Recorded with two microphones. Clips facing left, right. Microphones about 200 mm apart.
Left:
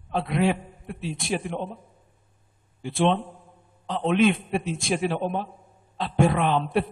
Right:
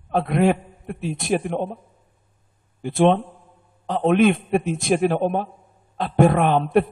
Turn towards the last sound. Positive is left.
turn(degrees=-50)  # may be behind; listen again after turning